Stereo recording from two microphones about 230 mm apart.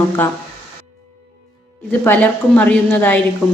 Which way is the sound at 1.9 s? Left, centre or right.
Centre.